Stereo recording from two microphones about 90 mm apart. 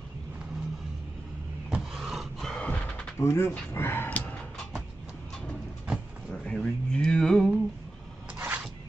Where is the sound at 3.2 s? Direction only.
30° left (ahead or behind).